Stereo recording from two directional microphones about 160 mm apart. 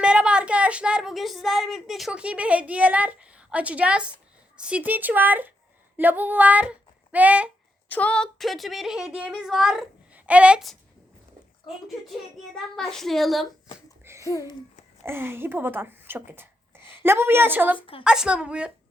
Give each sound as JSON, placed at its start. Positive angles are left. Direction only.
{"t": 0.0, "sound": "a woman's voice", "side_deg": -5}
{"t": 7.9, "sound": "speech", "side_deg": 10}
{"t": 12.5, "sound": "speech", "side_deg": 0}
{"t": 14.0, "sound": "a sound", "side_deg": -15}
{"t": 14.3, "sound": "speech", "side_deg": 20}
{"t": 15.0, "sound": "speech", "side_deg": -15}
{"t": 17.7, "sound": "a woman's voice", "side_deg": 35}
{"t": 18.0, "sound": "speech", "side_deg": -5}